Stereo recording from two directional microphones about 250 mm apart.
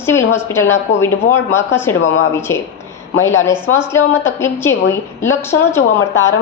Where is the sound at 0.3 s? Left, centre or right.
Centre.